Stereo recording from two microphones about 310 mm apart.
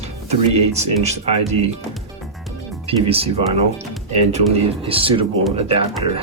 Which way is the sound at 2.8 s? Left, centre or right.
Centre.